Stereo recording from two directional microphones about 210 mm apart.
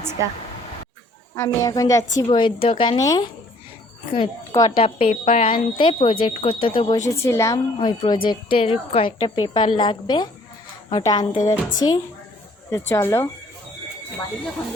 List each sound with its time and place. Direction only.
1.4 s a child's voice: 15° left (ahead or behind)
7.0 s a woman's voice: 15° left (ahead or behind)